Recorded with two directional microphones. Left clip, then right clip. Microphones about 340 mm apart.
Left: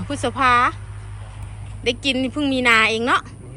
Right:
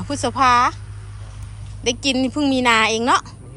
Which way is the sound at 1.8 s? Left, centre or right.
Centre.